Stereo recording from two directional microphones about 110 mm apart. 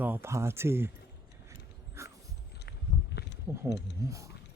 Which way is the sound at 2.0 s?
25° right (ahead or behind).